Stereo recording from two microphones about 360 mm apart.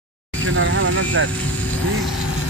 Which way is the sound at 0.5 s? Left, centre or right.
Right.